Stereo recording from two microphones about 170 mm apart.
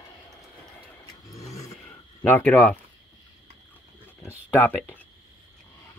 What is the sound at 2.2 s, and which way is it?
Speech, 10° left (ahead or behind).